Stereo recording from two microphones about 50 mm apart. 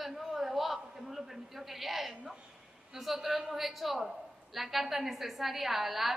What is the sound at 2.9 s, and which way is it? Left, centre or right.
A woman's voice, centre.